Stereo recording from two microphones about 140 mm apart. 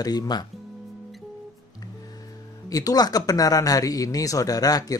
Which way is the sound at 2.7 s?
25° left (ahead or behind).